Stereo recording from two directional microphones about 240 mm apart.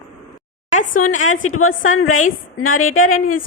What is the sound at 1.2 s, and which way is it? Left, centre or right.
Speech, left.